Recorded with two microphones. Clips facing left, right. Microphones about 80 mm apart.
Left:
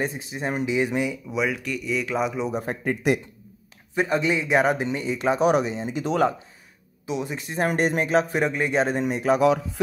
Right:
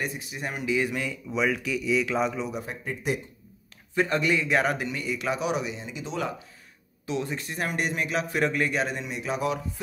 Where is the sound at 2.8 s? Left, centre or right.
Left.